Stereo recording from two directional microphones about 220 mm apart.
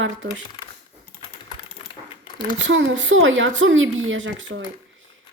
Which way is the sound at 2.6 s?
60° right (ahead or behind).